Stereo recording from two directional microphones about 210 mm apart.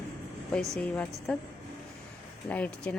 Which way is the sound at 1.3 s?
5° left (ahead or behind).